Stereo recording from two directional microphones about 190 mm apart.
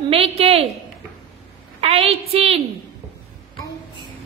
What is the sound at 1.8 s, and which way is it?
Speech, 30° right (ahead or behind).